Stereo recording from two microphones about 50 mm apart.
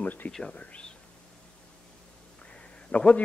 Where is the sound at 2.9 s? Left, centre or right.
Left.